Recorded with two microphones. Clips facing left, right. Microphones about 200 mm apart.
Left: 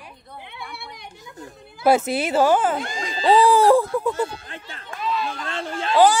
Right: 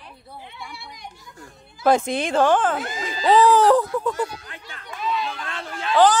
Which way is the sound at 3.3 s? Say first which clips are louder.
Even; 10° left (ahead or behind).